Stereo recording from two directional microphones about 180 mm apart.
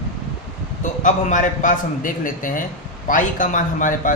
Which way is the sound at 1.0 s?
45° left (ahead or behind).